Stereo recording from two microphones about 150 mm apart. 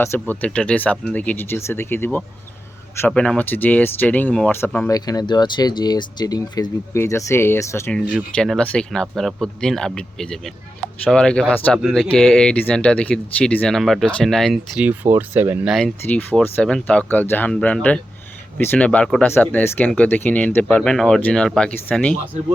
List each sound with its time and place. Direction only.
0.0 s speech: 15° left (ahead or behind)
4.9 s speech: 25° left (ahead or behind)
8.4 s speech: 5° left (ahead or behind); by 15.7 s 10° right (ahead or behind)
15.7 s speech: 5° left (ahead or behind)